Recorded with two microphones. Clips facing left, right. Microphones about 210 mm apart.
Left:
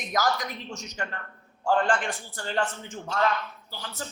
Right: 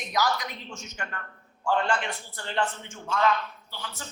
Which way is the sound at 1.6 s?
50° left (ahead or behind).